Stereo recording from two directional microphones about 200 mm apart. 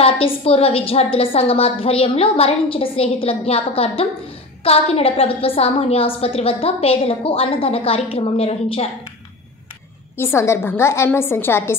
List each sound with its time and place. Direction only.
0.0 s a woman's voice: 30° left (ahead or behind)
10.1 s a woman's voice: 10° left (ahead or behind)